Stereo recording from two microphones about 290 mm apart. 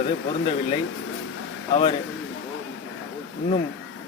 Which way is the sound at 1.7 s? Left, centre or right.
Centre.